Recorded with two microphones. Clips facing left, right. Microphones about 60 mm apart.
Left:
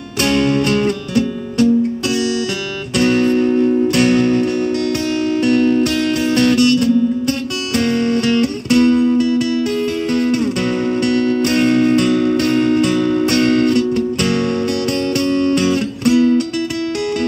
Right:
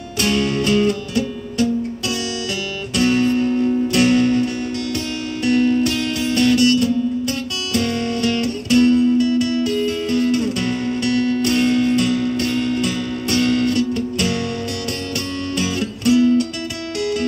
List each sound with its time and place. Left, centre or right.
0.2 s music: left
2.9 s guitar: left
3.9 s music: left